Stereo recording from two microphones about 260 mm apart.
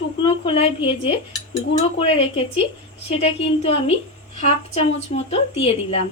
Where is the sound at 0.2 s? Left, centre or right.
Left.